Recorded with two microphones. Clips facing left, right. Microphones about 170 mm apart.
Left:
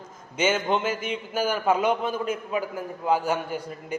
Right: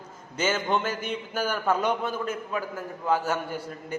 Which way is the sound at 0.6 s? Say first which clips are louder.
Left 2 dB; 10° left (ahead or behind).